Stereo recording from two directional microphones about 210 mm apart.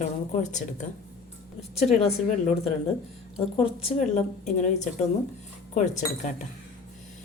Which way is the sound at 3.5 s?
30° left (ahead or behind).